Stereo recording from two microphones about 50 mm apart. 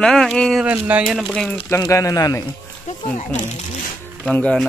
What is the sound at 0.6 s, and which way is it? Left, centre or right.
Speech, right.